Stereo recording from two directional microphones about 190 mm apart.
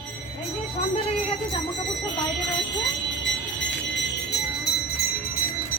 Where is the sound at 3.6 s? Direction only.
65° left (ahead or behind).